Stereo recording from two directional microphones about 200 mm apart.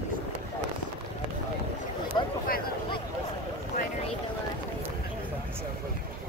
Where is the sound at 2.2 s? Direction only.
25° left (ahead or behind).